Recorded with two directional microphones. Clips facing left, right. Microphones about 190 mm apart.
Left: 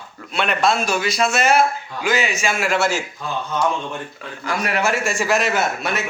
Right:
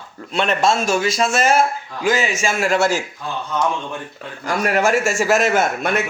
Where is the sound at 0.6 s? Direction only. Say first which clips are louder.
Right 1 dB; 25° right (ahead or behind).